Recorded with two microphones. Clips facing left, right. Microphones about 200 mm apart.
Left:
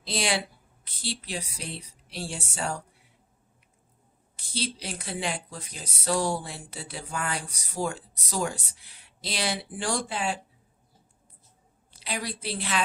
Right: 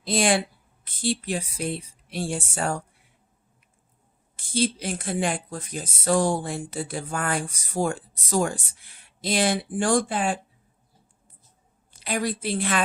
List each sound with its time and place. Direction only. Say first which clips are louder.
0.0 s speech: right 7 dB; 50° right (ahead or behind)
4.4 s speech: right 9 dB; 50° right (ahead or behind)
11.9 s speech: right 7 dB; 50° right (ahead or behind)